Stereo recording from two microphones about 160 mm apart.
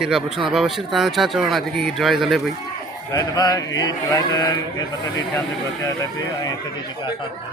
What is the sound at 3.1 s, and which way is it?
Speech, 25° left (ahead or behind).